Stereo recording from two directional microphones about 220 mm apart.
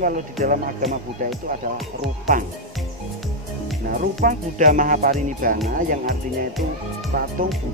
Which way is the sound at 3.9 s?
40° right (ahead or behind).